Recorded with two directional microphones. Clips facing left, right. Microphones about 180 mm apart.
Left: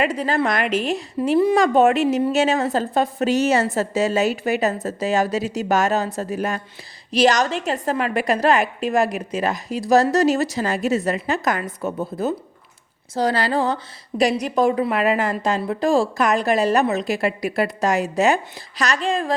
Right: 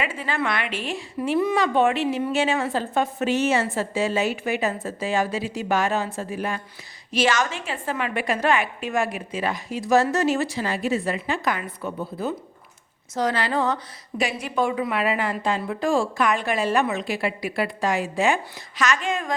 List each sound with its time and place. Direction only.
0.0 s a woman's voice: 40° left (ahead or behind)